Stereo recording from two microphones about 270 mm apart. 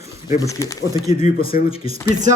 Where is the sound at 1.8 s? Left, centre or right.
Right.